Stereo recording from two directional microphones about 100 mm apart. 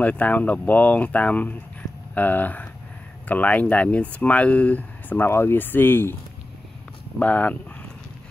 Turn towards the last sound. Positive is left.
turn(degrees=15)  # may be behind; listen again after turning